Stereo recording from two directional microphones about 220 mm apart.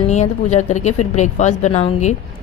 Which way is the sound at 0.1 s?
30° left (ahead or behind).